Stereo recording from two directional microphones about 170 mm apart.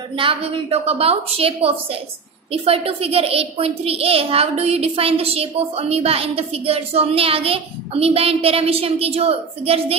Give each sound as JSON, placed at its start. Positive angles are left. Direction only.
{"t": 0.2, "sound": "a child's voice", "side_deg": -35}